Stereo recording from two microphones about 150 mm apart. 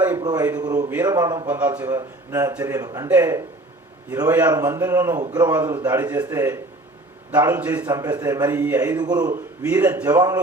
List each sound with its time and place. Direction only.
0.2 s speech: 25° right (ahead or behind)
1.5 s a man's voice: 10° right (ahead or behind)
1.8 s a man's voice: 25° right (ahead or behind)
4.5 s speech: 25° right (ahead or behind)
6.0 s a man's voice: 10° right (ahead or behind)
6.2 s speech: 20° right (ahead or behind)
7.3 s a man's voice: 10° right (ahead or behind)
7.9 s speech: 25° right (ahead or behind)
8.5 s a man's voice: 10° right (ahead or behind)
9.0 s speech: 25° right (ahead or behind)
9.6 s a man's voice: 10° right (ahead or behind)
10.1 s speech: 25° right (ahead or behind)